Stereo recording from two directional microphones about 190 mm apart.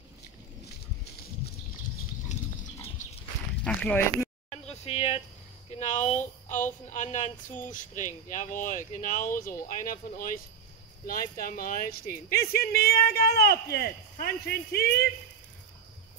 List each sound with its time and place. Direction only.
3.6 s speech: 5° left (ahead or behind)
4.5 s a sound: 35° left (ahead or behind)
5.7 s a woman's voice: 35° left (ahead or behind); by 14.9 s 55° left (ahead or behind)